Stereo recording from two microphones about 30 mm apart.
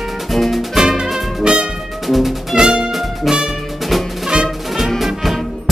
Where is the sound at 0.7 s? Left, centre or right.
Centre.